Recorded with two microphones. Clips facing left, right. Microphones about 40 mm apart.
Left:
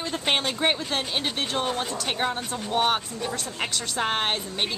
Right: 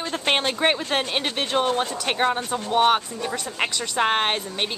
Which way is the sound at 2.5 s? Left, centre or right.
Centre.